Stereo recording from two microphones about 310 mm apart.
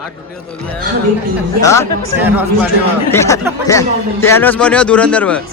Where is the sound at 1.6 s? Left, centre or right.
Centre.